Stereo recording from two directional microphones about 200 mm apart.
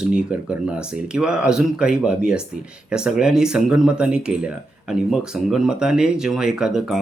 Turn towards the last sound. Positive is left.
turn(degrees=0)  # may be behind; listen again after turning